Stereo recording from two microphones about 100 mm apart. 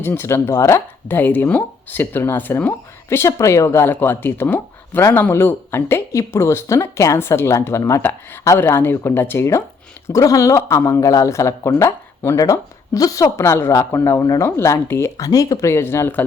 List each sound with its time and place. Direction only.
0.0 s speech: 25° left (ahead or behind)